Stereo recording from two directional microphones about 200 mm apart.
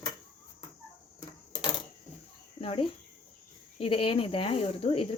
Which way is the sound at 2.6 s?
30° left (ahead or behind).